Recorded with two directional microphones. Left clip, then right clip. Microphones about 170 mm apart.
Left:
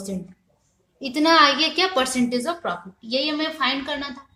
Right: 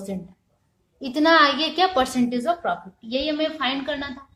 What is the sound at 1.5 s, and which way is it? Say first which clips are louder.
Speech: left 2 dB; centre (ahead or behind).